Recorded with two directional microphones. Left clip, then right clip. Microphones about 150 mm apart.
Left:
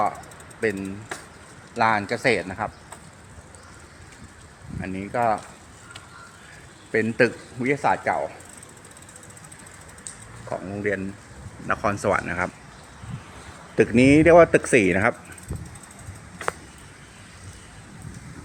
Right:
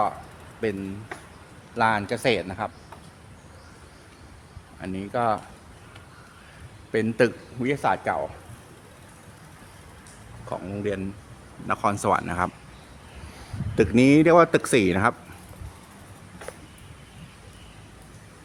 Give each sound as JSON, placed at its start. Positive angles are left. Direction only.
{"t": 1.7, "sound": "speech", "side_deg": -5}
{"t": 4.8, "sound": "a man's voice", "side_deg": -15}
{"t": 6.9, "sound": "a man's voice", "side_deg": -5}
{"t": 10.5, "sound": "a man's voice", "side_deg": -10}
{"t": 13.7, "sound": "speech", "side_deg": -5}